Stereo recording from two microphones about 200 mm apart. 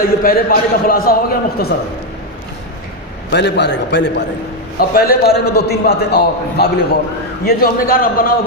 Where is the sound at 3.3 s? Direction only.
60° left (ahead or behind).